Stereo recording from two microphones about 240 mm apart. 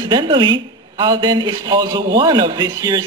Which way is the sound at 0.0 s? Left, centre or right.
Centre.